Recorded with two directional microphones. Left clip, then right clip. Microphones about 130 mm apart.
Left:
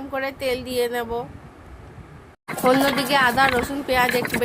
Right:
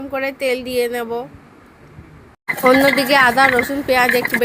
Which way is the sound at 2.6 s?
35° right (ahead or behind).